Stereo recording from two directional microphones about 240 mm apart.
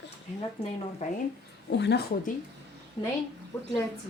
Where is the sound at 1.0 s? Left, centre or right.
Left.